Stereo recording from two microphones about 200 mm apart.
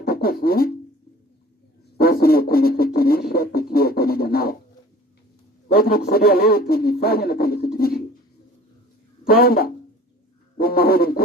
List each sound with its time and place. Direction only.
0.0 s music: 50° left (ahead or behind)
2.0 s a sound: 50° left (ahead or behind)
5.6 s speech: 50° left (ahead or behind)
9.2 s speech: 50° left (ahead or behind)
10.6 s bird: 50° left (ahead or behind)